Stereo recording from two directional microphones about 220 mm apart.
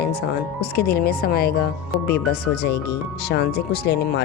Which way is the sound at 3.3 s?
50° left (ahead or behind).